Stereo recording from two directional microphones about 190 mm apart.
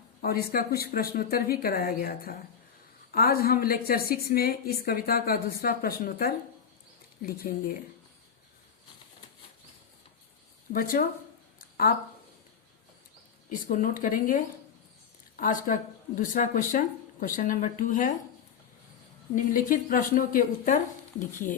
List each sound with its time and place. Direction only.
0.2 s a woman's voice: 50° left (ahead or behind)
10.7 s a woman's voice: 50° left (ahead or behind)
13.5 s a woman's voice: 45° left (ahead or behind)
19.5 s a woman's voice: 45° left (ahead or behind)